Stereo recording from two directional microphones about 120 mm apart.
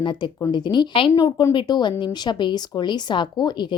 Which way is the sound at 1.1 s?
30° left (ahead or behind).